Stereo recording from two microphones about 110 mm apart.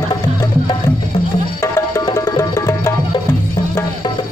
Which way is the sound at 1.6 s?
35° left (ahead or behind).